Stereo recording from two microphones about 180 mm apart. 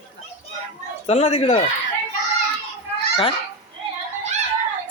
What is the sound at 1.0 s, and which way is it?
Speech, 35° left (ahead or behind).